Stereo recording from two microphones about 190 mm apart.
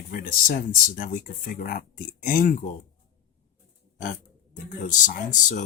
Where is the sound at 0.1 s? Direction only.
50° left (ahead or behind).